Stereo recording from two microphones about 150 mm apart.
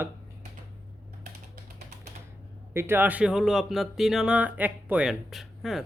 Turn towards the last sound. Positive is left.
turn(degrees=0)  # may be behind; listen again after turning